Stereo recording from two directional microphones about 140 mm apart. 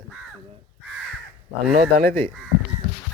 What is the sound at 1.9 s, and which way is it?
Speech, 90° right.